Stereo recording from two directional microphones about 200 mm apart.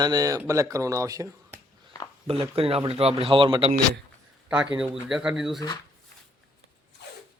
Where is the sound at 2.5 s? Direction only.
30° right (ahead or behind).